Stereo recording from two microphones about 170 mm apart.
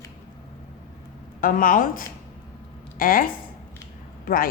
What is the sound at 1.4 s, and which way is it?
A woman's voice, 55° left (ahead or behind).